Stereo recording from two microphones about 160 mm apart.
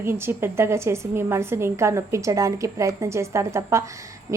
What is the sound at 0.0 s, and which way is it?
A woman's voice, 15° right (ahead or behind).